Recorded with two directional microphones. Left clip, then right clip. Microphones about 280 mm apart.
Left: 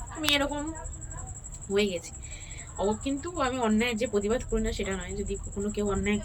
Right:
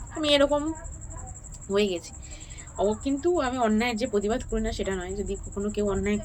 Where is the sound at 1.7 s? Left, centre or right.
Centre.